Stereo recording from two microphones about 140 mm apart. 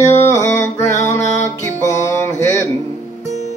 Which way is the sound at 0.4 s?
15° left (ahead or behind).